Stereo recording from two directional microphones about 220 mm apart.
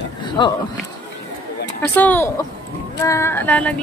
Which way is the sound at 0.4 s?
20° left (ahead or behind).